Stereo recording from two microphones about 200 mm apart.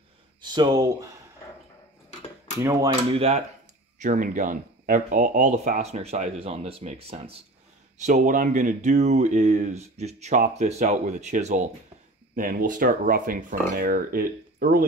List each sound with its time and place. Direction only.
0.4 s speech: 20° right (ahead or behind)
2.6 s speech: 15° right (ahead or behind)
3.2 s speech: 30° right (ahead or behind)